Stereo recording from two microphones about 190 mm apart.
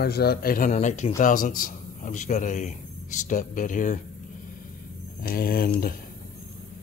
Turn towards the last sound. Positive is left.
turn(degrees=50)  # may be behind; listen again after turning